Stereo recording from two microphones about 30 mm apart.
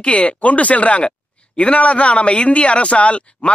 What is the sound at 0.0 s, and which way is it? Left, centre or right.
A man's voice, left.